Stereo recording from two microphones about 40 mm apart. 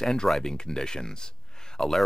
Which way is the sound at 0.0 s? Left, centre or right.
Centre.